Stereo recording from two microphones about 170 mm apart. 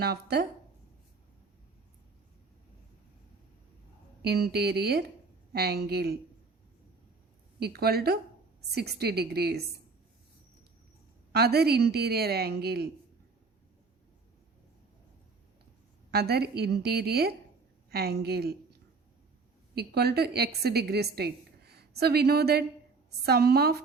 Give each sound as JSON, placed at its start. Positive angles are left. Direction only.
{"t": 0.0, "sound": "a woman's voice", "side_deg": -70}
{"t": 4.2, "sound": "a woman's voice", "side_deg": -70}
{"t": 7.6, "sound": "a woman's voice", "side_deg": -70}
{"t": 11.3, "sound": "a woman's voice", "side_deg": -70}
{"t": 16.1, "sound": "a woman's voice", "side_deg": -70}
{"t": 19.7, "sound": "a woman's voice", "side_deg": -70}